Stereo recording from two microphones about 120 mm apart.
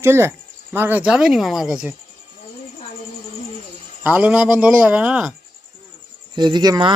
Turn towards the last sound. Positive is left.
turn(degrees=-35)  # may be behind; listen again after turning